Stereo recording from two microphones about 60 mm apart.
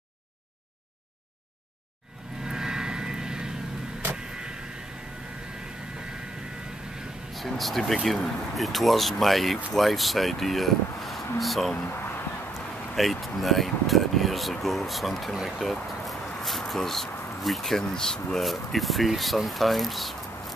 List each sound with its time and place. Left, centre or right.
2.4 s vehicle: centre
7.3 s speech: centre
11.7 s speech: left
12.5 s speech: centre